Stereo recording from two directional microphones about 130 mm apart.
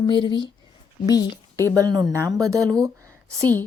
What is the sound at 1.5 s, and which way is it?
Speech, 25° right (ahead or behind).